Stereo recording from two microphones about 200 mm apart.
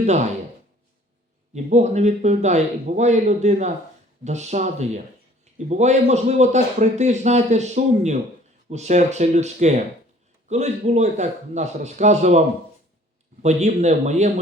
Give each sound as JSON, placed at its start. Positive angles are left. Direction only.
{"t": 0.0, "sound": "speech", "side_deg": -35}
{"t": 1.5, "sound": "a man's voice", "side_deg": -35}
{"t": 13.4, "sound": "a man's voice", "side_deg": -35}